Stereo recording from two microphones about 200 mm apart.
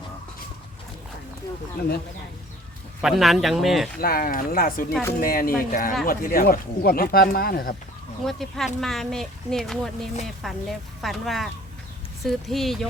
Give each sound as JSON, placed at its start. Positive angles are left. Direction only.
{"t": 3.0, "sound": "speech", "side_deg": 0}
{"t": 3.9, "sound": "speech", "side_deg": 45}
{"t": 8.2, "sound": "speech", "side_deg": 0}